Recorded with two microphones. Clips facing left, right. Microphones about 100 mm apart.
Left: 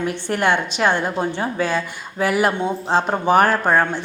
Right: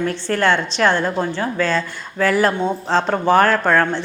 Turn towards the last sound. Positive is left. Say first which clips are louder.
# right 1 dB
turn(degrees=15)  # may be behind; listen again after turning